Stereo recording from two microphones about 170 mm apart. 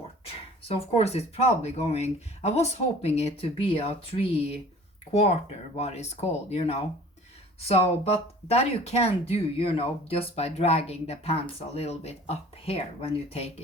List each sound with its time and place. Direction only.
0.3 s speech: 35° left (ahead or behind)